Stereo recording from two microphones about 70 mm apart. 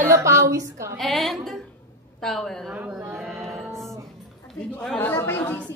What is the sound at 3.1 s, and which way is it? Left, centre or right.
Music, centre.